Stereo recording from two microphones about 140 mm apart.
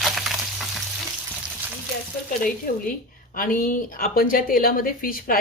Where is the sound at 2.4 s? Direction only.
80° left.